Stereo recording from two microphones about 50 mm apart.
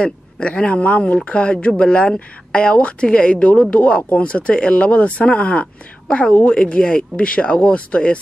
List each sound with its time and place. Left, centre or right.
0.0 s speech: centre